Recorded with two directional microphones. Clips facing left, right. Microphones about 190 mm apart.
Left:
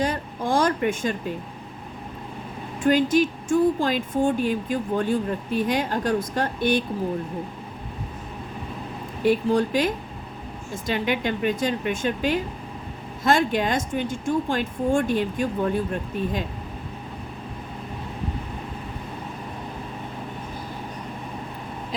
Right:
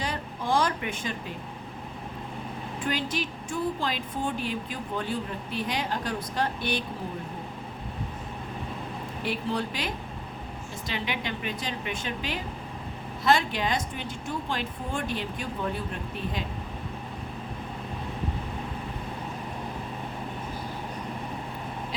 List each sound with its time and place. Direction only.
0.0 s a sound: 45° left (ahead or behind)
2.8 s speech: 45° left (ahead or behind)
9.2 s speech: 45° left (ahead or behind)